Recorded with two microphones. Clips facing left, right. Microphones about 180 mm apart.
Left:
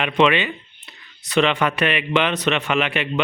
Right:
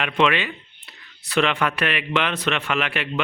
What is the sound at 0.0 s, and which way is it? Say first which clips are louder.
A man's voice: left 3 dB; centre (ahead or behind).